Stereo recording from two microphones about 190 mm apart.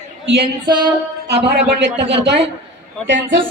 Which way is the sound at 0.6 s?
25° right (ahead or behind).